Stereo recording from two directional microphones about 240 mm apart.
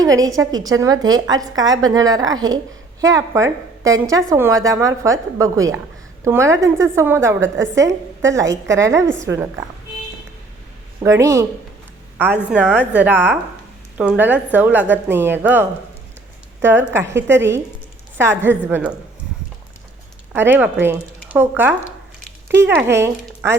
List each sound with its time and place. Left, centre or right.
0.0 s a woman's voice: centre
7.4 s a woman's voice: right
8.7 s a woman's voice: centre
11.0 s a woman's voice: centre
20.3 s a woman's voice: centre
22.8 s speech: centre